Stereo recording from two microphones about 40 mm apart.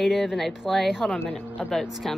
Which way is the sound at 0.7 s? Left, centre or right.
Centre.